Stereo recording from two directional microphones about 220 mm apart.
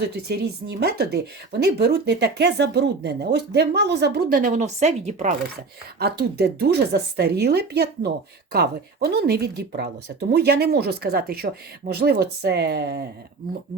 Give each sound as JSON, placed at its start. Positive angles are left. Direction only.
{"t": 0.2, "sound": "a woman's voice", "side_deg": -50}
{"t": 6.0, "sound": "a woman's voice", "side_deg": -45}